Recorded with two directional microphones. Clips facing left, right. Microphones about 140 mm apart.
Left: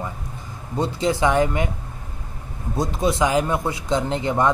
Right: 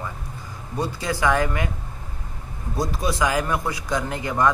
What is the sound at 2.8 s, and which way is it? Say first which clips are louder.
Speech: left 3 dB; 20° left (ahead or behind).